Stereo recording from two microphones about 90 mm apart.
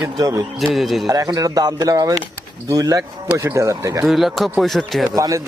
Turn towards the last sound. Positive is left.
turn(degrees=-35)  # may be behind; listen again after turning